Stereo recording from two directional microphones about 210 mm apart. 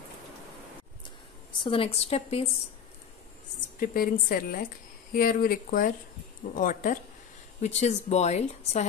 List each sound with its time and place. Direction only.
1.6 s a woman's voice: 25° left (ahead or behind)
3.8 s a woman's voice: 45° left (ahead or behind)